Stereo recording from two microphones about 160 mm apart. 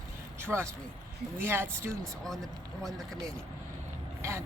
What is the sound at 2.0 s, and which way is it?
Speech, 5° left (ahead or behind).